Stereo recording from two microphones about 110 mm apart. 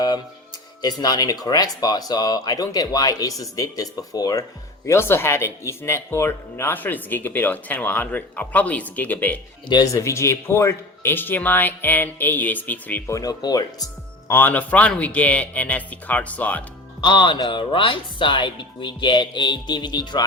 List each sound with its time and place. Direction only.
0.8 s speech: 40° left (ahead or behind)
4.9 s speech: 20° left (ahead or behind)
9.6 s speech: 35° left (ahead or behind); by 13.0 s 15° left (ahead or behind)
13.1 s speech: 30° left (ahead or behind)
14.3 s speech: 20° left (ahead or behind)
17.0 s speech: 45° left (ahead or behind)